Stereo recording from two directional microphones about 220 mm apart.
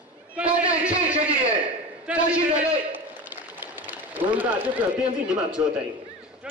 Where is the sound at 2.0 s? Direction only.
5° right (ahead or behind).